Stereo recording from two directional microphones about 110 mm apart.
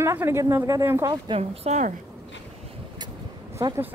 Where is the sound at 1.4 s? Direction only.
80° right.